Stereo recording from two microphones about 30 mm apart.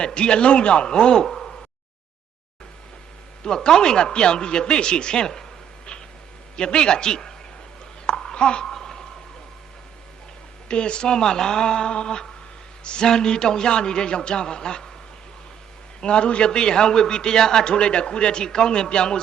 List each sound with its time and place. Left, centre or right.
0.0 s speech: left
1.2 s a sound: centre
3.4 s speech: centre
6.7 s speech: left
8.1 s a sound: left
8.7 s a sound: centre
10.7 s speech: left
16.0 s speech: left
17.7 s speech: left